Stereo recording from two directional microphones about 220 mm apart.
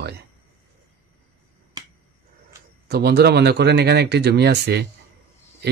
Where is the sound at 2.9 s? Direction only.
45° right (ahead or behind).